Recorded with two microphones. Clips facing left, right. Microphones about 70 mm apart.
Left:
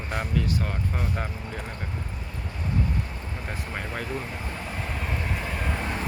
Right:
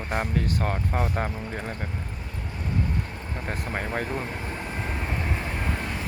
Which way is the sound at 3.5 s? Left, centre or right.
Right.